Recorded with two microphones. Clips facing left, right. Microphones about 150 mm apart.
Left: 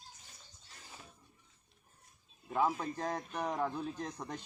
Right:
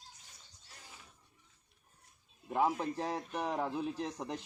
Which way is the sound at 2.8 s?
25° right (ahead or behind).